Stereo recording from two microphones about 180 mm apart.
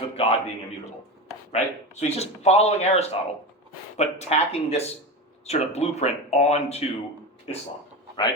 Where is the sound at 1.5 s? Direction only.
40° left (ahead or behind).